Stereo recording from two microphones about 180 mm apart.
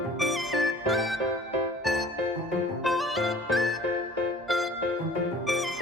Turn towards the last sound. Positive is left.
turn(degrees=0)  # may be behind; listen again after turning